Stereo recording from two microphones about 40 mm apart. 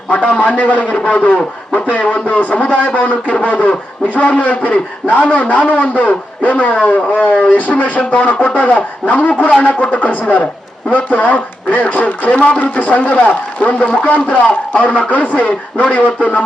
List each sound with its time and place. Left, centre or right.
0.1 s a man's voice: left
1.0 s a man's voice: left
9.4 s a man's voice: left